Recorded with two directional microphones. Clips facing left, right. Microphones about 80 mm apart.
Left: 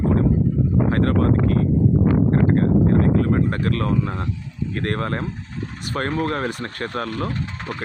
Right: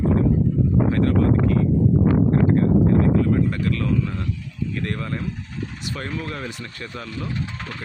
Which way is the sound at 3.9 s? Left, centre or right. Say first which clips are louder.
Left 1 dB; left.